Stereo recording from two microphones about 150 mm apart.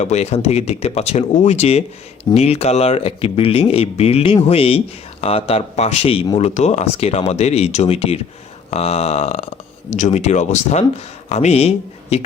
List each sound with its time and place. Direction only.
0.0 s speech: 45° left (ahead or behind)